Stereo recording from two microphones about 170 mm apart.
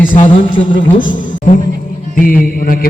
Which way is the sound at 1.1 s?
50° left (ahead or behind).